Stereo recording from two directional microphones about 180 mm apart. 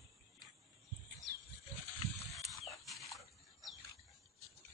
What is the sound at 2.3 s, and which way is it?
Dog, centre (ahead or behind).